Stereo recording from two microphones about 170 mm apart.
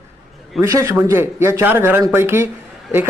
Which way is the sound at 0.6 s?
15° right (ahead or behind).